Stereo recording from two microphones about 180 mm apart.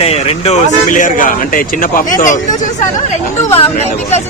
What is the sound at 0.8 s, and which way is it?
Speech, 45° left (ahead or behind).